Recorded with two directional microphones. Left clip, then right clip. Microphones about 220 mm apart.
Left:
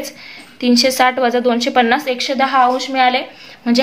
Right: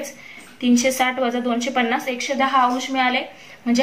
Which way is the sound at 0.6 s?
45° left (ahead or behind).